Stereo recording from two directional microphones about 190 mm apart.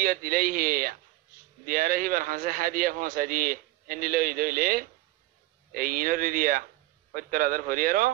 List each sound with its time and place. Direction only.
0.0 s a man's voice: 45° right (ahead or behind)